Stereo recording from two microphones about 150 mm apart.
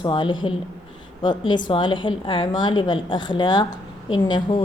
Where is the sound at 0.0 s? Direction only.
35° left (ahead or behind).